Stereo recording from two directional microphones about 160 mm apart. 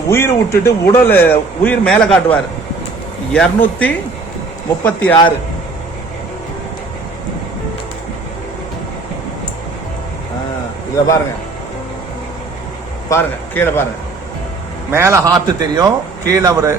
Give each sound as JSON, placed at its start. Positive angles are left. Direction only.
{"t": 0.1, "sound": "a man's voice", "side_deg": 15}
{"t": 13.1, "sound": "a man's voice", "side_deg": 15}
{"t": 14.8, "sound": "a man's voice", "side_deg": -15}